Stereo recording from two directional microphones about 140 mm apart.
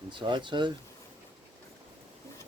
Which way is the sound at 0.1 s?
35° right (ahead or behind).